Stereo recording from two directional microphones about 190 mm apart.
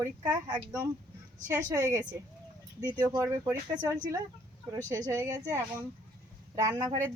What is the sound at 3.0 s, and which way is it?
A woman's voice, 15° right (ahead or behind).